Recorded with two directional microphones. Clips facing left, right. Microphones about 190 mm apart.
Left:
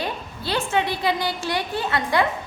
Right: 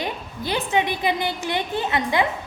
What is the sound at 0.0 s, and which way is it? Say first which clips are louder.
A woman's voice: right 1 dB; 15° right (ahead or behind).